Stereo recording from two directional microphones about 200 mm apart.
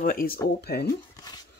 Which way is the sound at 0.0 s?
45° left (ahead or behind).